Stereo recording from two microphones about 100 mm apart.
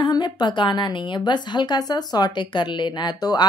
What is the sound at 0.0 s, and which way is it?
A woman's voice, 45° left (ahead or behind).